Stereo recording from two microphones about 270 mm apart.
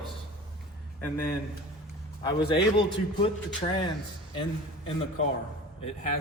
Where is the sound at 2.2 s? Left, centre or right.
Centre.